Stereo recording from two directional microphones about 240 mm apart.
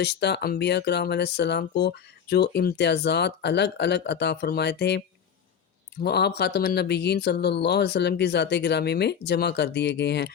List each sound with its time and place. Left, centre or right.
0.0 s speech: left